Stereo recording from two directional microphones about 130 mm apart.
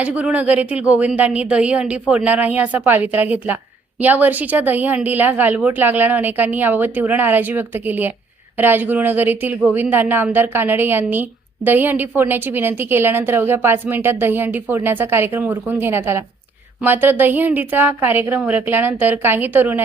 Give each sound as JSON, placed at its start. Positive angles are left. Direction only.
{"t": 0.0, "sound": "speech", "side_deg": -10}